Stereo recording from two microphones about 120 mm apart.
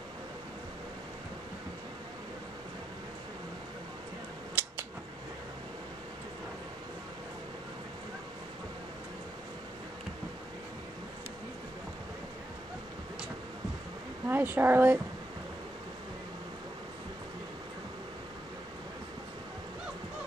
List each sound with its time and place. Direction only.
4.6 s scissors: 15° right (ahead or behind)
14.2 s speech: 20° right (ahead or behind)